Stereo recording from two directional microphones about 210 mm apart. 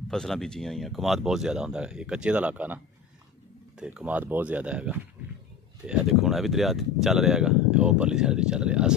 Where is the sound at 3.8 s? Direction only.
5° right (ahead or behind).